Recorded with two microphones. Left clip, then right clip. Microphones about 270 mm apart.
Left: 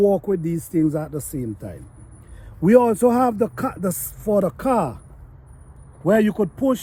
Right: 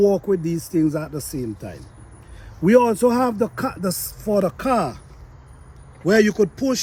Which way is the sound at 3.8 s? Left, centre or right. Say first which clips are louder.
Left 1 dB; centre.